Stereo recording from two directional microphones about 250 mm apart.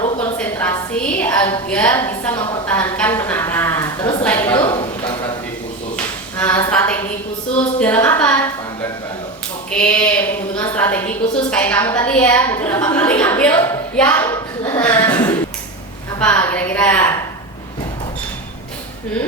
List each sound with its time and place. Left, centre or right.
0.2 s a sound: centre
1.2 s a woman's voice: centre
4.5 s a man's voice: centre
6.3 s a woman's voice: centre